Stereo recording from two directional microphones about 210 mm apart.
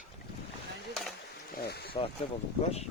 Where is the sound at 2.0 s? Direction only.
25° left (ahead or behind).